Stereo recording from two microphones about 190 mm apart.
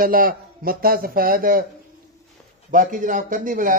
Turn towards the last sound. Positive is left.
turn(degrees=-45)  # may be behind; listen again after turning